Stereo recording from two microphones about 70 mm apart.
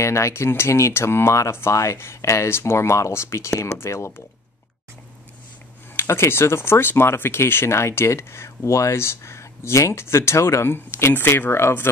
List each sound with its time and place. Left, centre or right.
0.0 s speech: left
5.9 s speech: left